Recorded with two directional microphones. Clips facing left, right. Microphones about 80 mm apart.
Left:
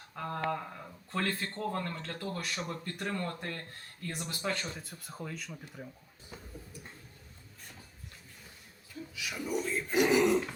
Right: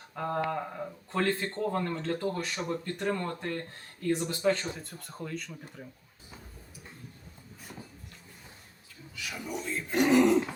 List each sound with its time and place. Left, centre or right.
0.2 s speech: centre
0.5 s a sound: centre
1.3 s speech: right
3.0 s speech: centre
4.1 s speech: right
4.7 s speech: centre
9.1 s speech: centre